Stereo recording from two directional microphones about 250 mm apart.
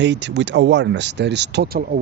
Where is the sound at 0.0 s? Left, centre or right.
Right.